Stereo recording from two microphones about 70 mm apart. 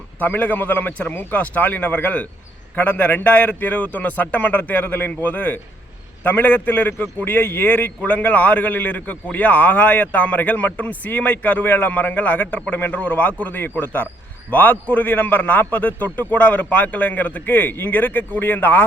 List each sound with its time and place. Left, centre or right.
0.2 s a man's voice: left